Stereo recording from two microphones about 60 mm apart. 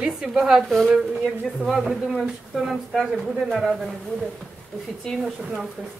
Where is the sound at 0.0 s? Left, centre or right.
Centre.